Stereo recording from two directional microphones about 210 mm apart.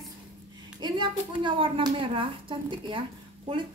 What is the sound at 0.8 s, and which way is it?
A woman's voice, 20° right (ahead or behind).